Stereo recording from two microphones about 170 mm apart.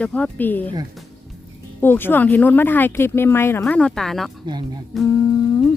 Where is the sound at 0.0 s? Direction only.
10° left (ahead or behind).